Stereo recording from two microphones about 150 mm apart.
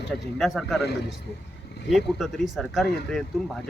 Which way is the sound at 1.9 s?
Centre (ahead or behind).